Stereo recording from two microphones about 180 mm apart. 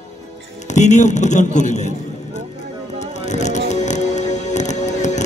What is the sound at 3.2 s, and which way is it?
Music, 40° left (ahead or behind).